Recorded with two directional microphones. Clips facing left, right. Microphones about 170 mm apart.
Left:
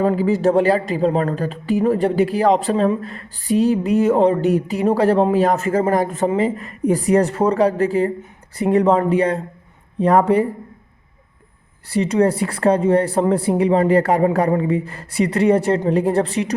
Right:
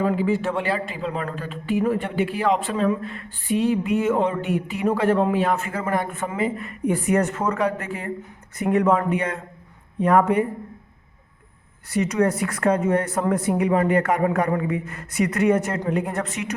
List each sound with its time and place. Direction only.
0.0 s a man's voice: 40° left (ahead or behind)
11.9 s a man's voice: 30° left (ahead or behind)